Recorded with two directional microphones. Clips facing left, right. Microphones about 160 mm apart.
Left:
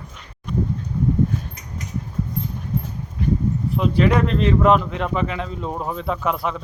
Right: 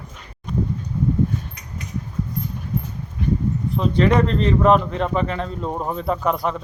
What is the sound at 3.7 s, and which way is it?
Speech, 10° left (ahead or behind).